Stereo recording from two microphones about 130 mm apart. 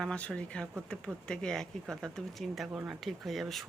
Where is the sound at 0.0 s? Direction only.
5° left (ahead or behind).